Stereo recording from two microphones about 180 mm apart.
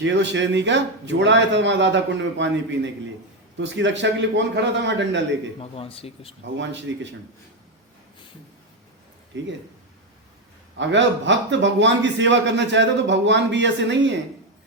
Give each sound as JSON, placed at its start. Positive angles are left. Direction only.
{"t": 0.0, "sound": "a man's voice", "side_deg": -80}
{"t": 5.5, "sound": "speech", "side_deg": 30}
{"t": 6.4, "sound": "speech", "side_deg": -90}
{"t": 9.3, "sound": "a man's voice", "side_deg": -80}
{"t": 10.8, "sound": "a man's voice", "side_deg": -90}